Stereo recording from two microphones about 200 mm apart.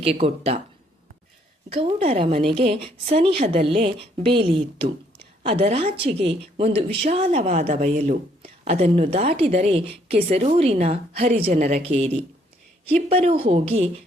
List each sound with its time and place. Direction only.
0.0 s a woman's voice: 30° right (ahead or behind)
1.7 s a woman's voice: 30° right (ahead or behind)